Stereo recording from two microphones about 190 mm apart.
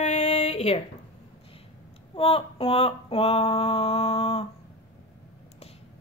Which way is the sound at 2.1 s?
30° left (ahead or behind).